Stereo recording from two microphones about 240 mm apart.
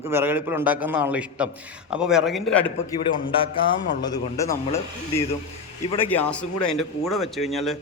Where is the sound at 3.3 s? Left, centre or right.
Left.